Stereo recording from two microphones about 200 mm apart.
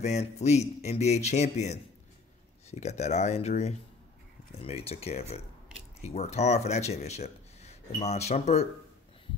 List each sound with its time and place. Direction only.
0.0 s speech: 35° left (ahead or behind)